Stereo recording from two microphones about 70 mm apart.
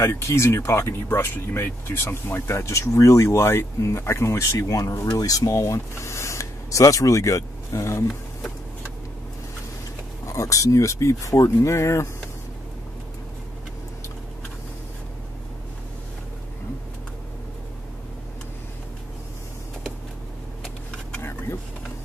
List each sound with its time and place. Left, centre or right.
0.0 s speech: left
10.2 s speech: left
21.2 s vehicle: left